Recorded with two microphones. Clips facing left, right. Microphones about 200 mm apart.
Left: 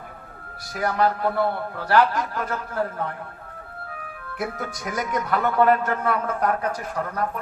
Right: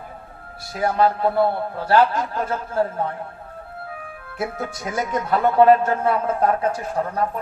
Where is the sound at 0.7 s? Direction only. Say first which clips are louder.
Right 3 dB; 25° right (ahead or behind).